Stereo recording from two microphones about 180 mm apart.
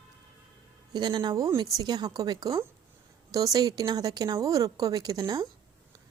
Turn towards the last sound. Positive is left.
turn(degrees=-20)  # may be behind; listen again after turning